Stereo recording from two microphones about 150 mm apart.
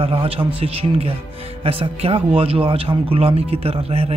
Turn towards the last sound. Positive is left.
turn(degrees=-40)  # may be behind; listen again after turning